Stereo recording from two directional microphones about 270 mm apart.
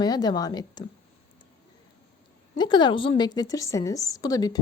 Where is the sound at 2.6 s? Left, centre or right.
Centre.